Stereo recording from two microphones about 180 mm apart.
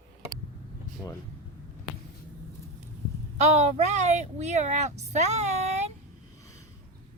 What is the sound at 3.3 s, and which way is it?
Speech, 40° right (ahead or behind).